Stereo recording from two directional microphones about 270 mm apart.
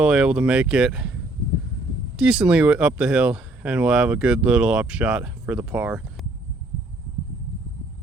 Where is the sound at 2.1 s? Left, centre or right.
Centre.